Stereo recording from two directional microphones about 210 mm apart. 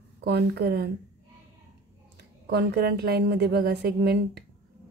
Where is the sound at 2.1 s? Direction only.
50° right (ahead or behind).